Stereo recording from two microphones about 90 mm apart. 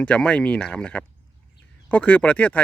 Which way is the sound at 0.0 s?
15° left (ahead or behind).